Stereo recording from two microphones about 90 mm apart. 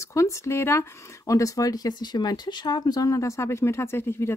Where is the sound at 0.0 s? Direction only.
35° left (ahead or behind).